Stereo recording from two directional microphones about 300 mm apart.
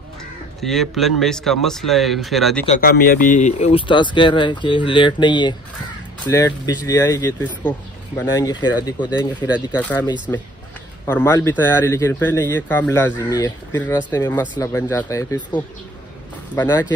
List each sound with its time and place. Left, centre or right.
0.6 s speech: centre
2.6 s speech: left; by 16.8 s centre